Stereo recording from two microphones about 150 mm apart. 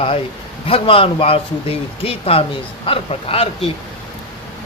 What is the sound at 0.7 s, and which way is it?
A man's voice, 40° left (ahead or behind).